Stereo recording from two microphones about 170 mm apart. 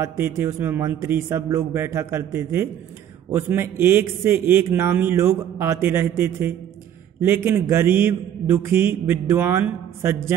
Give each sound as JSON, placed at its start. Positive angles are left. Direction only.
{"t": 0.0, "sound": "a man's voice", "side_deg": -15}